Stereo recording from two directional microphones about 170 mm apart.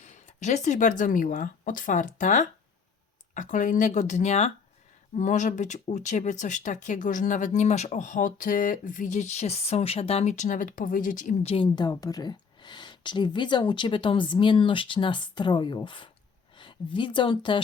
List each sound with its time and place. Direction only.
0.0 s a woman's voice: 45° left (ahead or behind)